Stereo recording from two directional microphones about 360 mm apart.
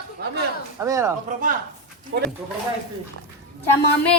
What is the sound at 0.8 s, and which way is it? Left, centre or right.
Speech, centre.